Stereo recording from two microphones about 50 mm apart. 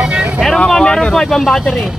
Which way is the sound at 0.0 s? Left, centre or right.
Centre.